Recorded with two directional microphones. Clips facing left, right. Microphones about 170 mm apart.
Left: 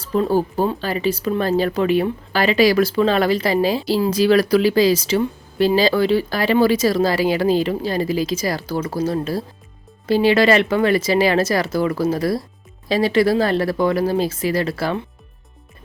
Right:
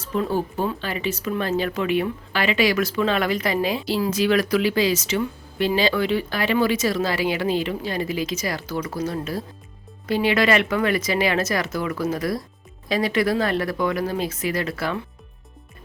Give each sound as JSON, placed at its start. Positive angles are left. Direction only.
{"t": 0.0, "sound": "speech", "side_deg": 35}